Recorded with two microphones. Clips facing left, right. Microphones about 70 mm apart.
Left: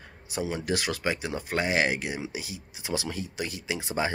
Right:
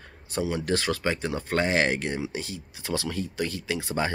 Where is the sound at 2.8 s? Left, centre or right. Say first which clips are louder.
Right 2 dB; centre.